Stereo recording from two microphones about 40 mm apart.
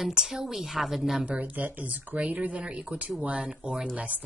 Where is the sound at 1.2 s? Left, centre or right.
Right; by 3.8 s centre.